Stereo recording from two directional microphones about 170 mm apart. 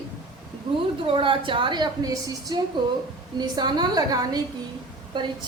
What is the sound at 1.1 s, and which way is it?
A woman's voice, 30° right (ahead or behind).